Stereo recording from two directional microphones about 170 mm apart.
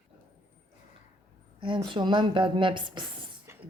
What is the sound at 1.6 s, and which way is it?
Speech, 30° right (ahead or behind).